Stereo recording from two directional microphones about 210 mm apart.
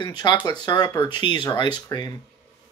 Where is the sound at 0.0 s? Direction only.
20° left (ahead or behind).